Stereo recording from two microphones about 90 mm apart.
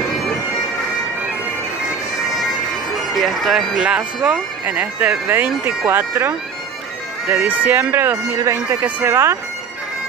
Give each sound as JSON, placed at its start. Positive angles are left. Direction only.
{"t": 3.2, "sound": "speech", "side_deg": 0}